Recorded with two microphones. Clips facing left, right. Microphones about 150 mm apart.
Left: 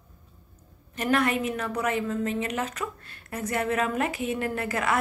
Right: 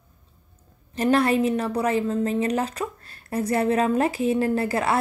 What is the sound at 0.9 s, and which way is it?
A woman's voice, 30° right (ahead or behind).